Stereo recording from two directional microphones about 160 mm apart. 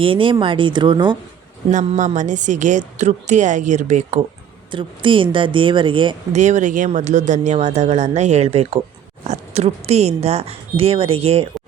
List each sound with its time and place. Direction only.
0.0 s speech: 35° right (ahead or behind)
1.7 s speech: 45° right (ahead or behind)
4.7 s speech: 30° right (ahead or behind)
6.3 s speech: 50° right (ahead or behind)